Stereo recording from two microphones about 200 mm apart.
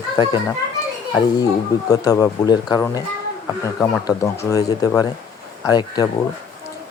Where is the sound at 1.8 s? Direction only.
20° left (ahead or behind).